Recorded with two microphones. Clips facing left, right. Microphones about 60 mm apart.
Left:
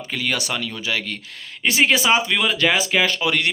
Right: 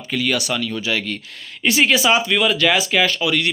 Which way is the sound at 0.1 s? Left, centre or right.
Left.